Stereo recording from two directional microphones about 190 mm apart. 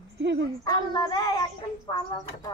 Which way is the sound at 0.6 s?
20° left (ahead or behind).